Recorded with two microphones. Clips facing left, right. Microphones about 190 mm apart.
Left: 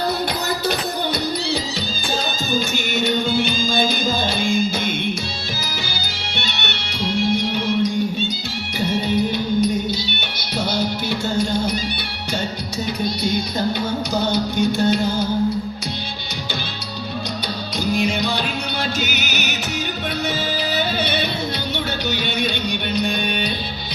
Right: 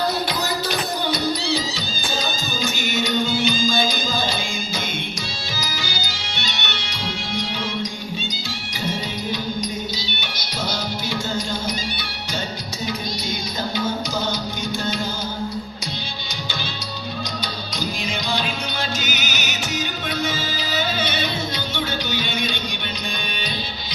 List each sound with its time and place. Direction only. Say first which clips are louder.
2.9 s music: left 3 dB; 55° left (ahead or behind)
5.9 s music: left 1 dB; 60° left (ahead or behind)
14.3 s music: left 8 dB; 60° left (ahead or behind)